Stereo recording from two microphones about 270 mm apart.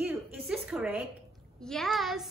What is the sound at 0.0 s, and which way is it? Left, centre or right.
A woman's voice, centre.